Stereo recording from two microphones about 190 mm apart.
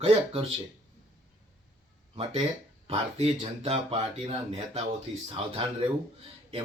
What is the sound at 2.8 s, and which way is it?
Speech, 30° right (ahead or behind).